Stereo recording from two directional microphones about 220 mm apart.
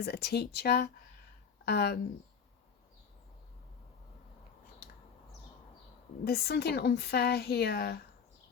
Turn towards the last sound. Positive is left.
turn(degrees=45)  # may be behind; listen again after turning